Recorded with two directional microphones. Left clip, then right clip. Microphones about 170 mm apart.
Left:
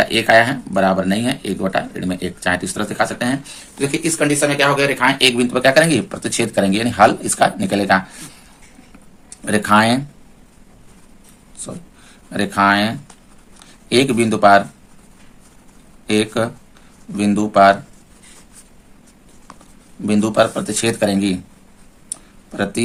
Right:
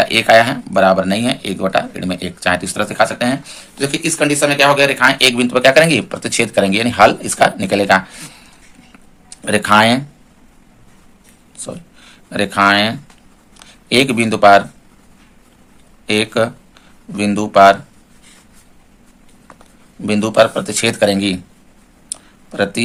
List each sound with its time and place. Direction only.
0.0 s speech: 20° right (ahead or behind)
11.5 s a sound: 15° right (ahead or behind)
12.3 s speech: 15° right (ahead or behind)
16.0 s speech: 15° right (ahead or behind)
20.0 s speech: 10° right (ahead or behind)
22.1 s a sound: 15° right (ahead or behind)